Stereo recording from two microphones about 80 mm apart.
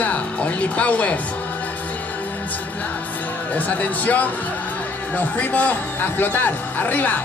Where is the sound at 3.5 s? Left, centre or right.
Left.